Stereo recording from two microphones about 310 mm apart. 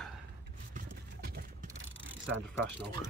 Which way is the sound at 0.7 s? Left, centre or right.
Right.